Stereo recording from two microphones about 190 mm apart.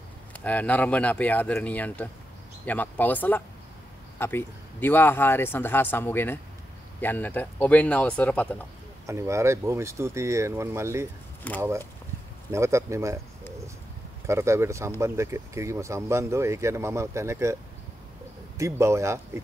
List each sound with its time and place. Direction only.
0.3 s speech: 10° left (ahead or behind)
9.0 s speech: 15° right (ahead or behind)
11.4 s speech: 10° left (ahead or behind)
12.4 s speech: 15° right (ahead or behind)
14.2 s speech: 15° right (ahead or behind)
18.6 s speech: 15° right (ahead or behind)